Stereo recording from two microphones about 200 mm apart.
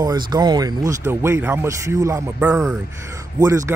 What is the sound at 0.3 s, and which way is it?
Speech, 20° right (ahead or behind).